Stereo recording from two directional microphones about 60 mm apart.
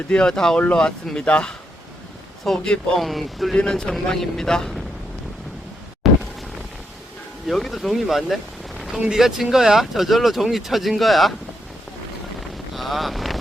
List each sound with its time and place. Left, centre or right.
0.1 s speech: centre
2.5 s speech: centre
3.5 s speech: centre
6.0 s a sound: centre
7.4 s speech: centre
12.7 s vehicle: centre